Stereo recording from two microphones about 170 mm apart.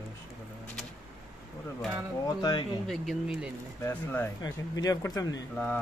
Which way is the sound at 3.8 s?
15° left (ahead or behind).